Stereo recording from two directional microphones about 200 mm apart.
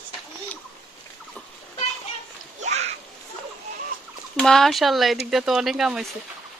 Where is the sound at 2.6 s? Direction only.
35° right (ahead or behind).